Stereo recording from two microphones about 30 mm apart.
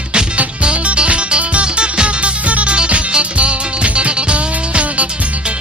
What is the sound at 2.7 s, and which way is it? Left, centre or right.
Music, right.